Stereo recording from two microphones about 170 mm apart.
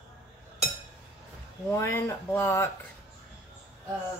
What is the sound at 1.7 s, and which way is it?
Speech, 15° left (ahead or behind).